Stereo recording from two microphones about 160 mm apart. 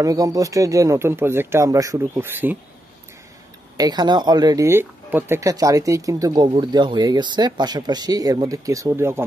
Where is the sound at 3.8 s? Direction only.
25° right (ahead or behind).